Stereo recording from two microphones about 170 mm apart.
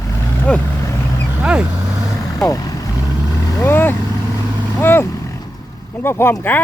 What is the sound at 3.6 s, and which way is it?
Speech, 10° left (ahead or behind).